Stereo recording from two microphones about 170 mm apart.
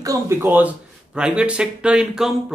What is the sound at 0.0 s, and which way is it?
Speech, 15° right (ahead or behind).